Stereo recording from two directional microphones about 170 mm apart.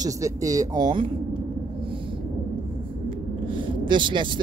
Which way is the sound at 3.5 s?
30° right (ahead or behind).